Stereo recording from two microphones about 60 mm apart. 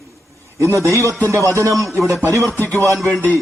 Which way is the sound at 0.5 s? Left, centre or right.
Right.